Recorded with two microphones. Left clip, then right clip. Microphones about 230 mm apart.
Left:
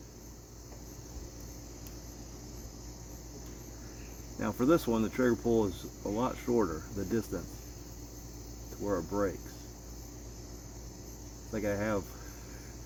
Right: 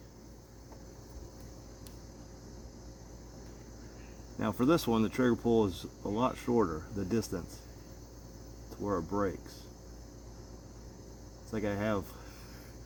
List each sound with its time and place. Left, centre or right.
4.4 s speech: right
8.9 s speech: right
11.5 s speech: right